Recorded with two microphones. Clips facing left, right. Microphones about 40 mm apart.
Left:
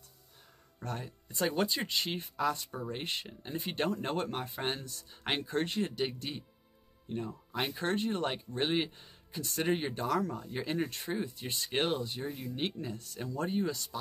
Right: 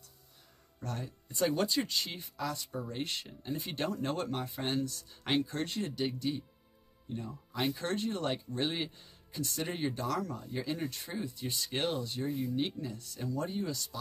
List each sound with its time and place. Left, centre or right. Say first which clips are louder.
0.7 s speech: left 1 dB; left
1.0 s speech: right 2 dB; centre
12.5 s speech: right 1 dB; left